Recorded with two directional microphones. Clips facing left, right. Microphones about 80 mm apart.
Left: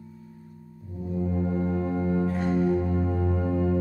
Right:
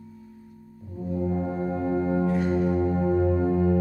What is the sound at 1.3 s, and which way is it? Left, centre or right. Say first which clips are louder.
Music: even; centre.